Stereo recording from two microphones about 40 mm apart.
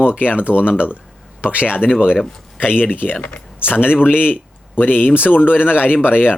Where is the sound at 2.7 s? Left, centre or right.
Left.